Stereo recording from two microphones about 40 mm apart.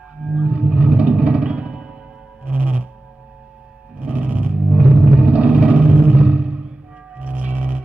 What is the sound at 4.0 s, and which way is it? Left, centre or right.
Music, right.